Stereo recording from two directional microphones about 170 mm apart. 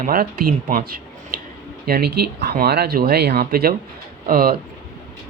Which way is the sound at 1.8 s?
70° right (ahead or behind).